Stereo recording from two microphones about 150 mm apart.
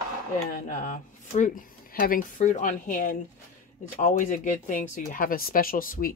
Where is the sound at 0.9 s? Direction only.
55° left (ahead or behind).